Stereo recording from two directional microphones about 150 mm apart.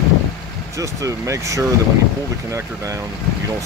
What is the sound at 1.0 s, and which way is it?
Speech, 20° right (ahead or behind).